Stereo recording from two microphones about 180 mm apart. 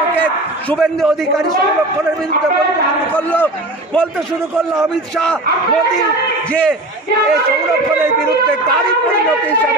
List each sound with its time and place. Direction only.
0.1 s a sound: 10° left (ahead or behind)
3.2 s a man's voice: 10° left (ahead or behind)
4.7 s a man's voice: 5° left (ahead or behind)
6.5 s a man's voice: 5° left (ahead or behind)